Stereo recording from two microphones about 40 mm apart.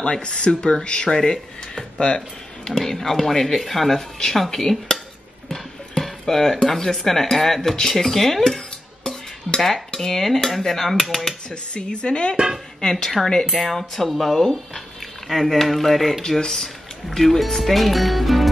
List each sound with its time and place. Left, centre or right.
0.0 s speech: left
2.8 s speech: centre
9.6 s speech: centre
11.4 s speech: left
13.5 s speech: centre
16.2 s speech: centre